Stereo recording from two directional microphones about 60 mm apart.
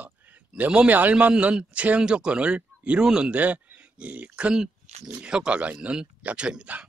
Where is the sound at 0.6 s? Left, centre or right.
Right.